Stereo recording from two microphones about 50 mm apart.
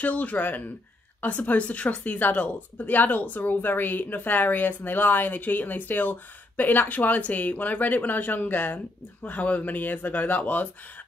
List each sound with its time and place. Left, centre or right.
0.0 s speech: left